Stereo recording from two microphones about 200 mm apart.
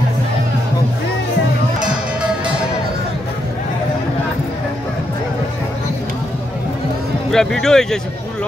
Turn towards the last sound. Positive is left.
turn(degrees=5)  # may be behind; listen again after turning